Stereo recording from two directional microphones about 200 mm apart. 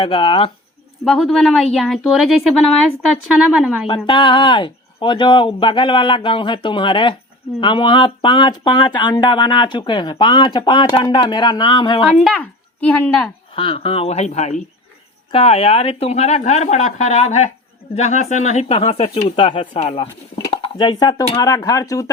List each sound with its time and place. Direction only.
0.0 s speech: 25° left (ahead or behind)
1.0 s speech: centre (ahead or behind)
3.8 s speech: 25° left (ahead or behind)
12.2 s speech: 5° left (ahead or behind)
13.5 s speech: 25° left (ahead or behind)